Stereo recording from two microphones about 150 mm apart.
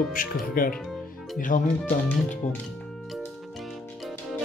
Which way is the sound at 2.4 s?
50° left (ahead or behind).